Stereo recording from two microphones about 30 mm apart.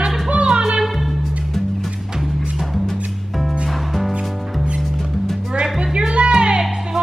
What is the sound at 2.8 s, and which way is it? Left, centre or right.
Music, centre.